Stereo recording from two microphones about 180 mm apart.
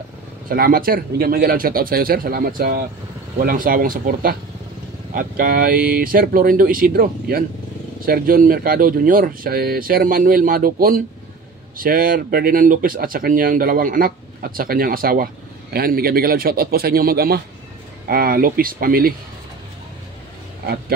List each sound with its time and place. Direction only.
0.5 s speech: 55° right (ahead or behind)